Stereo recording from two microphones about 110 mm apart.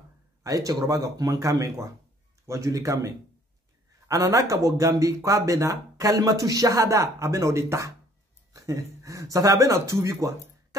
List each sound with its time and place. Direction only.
0.4 s speech: 30° right (ahead or behind)
4.1 s speech: 30° right (ahead or behind)